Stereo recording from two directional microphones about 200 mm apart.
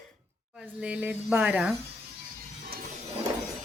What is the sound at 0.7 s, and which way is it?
Speech, 5° right (ahead or behind).